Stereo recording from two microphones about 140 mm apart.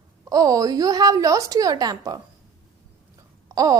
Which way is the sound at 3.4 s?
25° right (ahead or behind).